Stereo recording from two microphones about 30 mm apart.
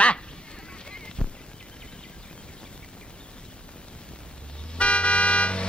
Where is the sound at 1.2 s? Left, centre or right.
Left.